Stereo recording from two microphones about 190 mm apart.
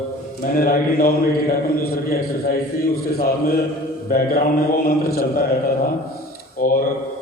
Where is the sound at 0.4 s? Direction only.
50° left (ahead or behind).